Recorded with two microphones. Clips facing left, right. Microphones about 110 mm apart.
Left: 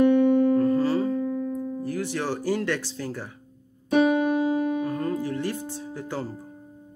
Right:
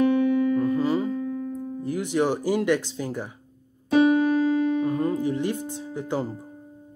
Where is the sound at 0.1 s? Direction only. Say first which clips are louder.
Left 2 dB; 55° left (ahead or behind).